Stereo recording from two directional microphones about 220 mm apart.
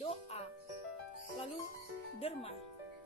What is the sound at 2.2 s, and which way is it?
Speech, 25° left (ahead or behind).